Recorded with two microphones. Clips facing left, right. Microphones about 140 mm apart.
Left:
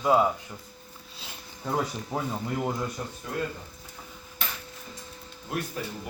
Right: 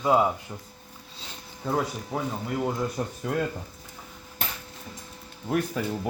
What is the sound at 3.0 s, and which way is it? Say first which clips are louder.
Speech: right 5 dB; 40° right (ahead or behind).